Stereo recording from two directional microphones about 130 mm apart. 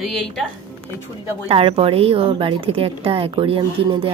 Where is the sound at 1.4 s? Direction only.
45° right (ahead or behind).